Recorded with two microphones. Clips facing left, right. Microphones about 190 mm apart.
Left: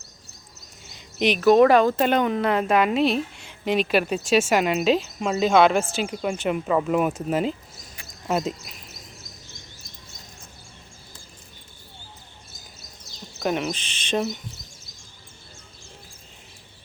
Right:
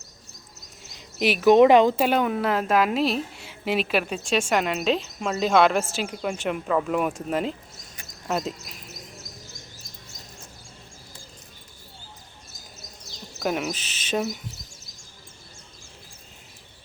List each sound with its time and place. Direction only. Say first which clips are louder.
0.9 s a sound: left 2 dB; 5° right (ahead or behind)
1.5 s speech: right 1 dB; 20° right (ahead or behind)
2.0 s a woman's voice: left 1 dB; 5° right (ahead or behind)
13.4 s a woman's voice: left 1 dB; 5° right (ahead or behind)